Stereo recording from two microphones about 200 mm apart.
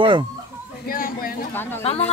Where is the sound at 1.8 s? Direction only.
30° left (ahead or behind).